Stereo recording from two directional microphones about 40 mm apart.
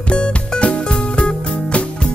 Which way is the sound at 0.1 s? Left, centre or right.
Left.